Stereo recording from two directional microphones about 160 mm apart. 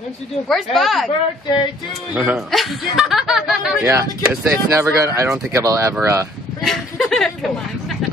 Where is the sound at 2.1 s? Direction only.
5° right (ahead or behind).